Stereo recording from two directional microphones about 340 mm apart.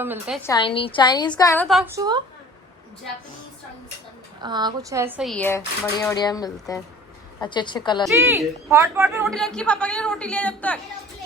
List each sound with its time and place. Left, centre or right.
0.0 s a man's voice: centre
0.4 s a woman's voice: centre
4.4 s a man's voice: centre
8.0 s a man's voice: centre